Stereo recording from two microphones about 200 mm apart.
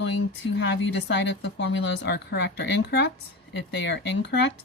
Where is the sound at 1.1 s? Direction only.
60° left (ahead or behind).